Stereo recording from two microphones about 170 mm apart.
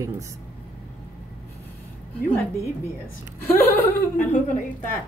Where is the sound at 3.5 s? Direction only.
10° left (ahead or behind).